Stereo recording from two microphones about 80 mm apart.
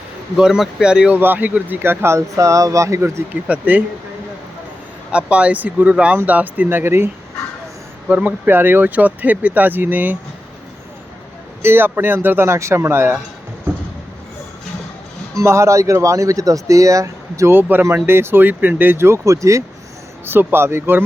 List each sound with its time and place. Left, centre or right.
0.3 s speech: centre
1.2 s speech: right
3.4 s speech: centre
5.1 s speech: centre; by 7.1 s right
8.0 s speech: centre
11.6 s speech: right
13.7 s a sound: right
15.4 s speech: right
17.5 s speech: right
20.2 s speech: right